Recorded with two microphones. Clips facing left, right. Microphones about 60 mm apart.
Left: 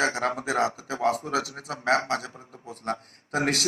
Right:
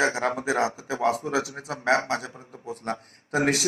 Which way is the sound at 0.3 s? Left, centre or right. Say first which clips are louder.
Right 1 dB; right.